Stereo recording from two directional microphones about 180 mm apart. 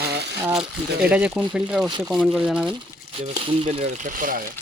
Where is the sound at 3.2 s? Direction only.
30° right (ahead or behind); by 4.4 s 50° right (ahead or behind).